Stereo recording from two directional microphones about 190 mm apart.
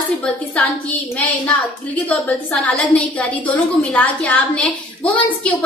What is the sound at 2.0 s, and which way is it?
A woman's voice, 5° left (ahead or behind).